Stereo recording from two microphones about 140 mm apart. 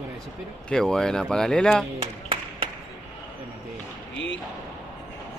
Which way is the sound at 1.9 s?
40° right (ahead or behind).